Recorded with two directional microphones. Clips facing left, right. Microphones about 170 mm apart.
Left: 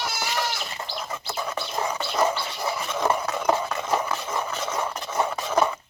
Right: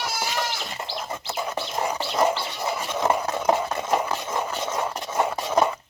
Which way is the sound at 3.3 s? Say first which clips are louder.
Right 1 dB; 20° right (ahead or behind).